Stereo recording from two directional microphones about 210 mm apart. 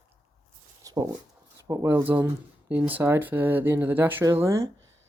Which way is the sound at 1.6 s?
15° right (ahead or behind).